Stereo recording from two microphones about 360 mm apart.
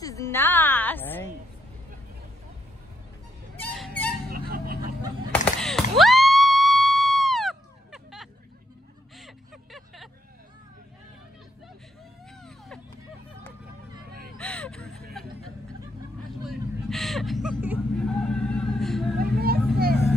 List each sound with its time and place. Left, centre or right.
0.0 s music: centre
3.5 s music: centre
4.3 s vehicle: right
5.6 s a sound: centre
9.1 s vehicle: centre
12.4 s vehicle: centre
14.4 s vehicle: centre
16.4 s vehicle: centre
19.4 s vehicle: right